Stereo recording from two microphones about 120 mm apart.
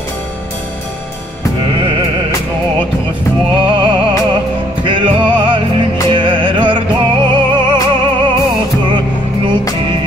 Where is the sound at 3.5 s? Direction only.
40° right (ahead or behind).